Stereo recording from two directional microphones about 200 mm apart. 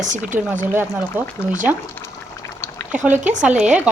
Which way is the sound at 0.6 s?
10° right (ahead or behind).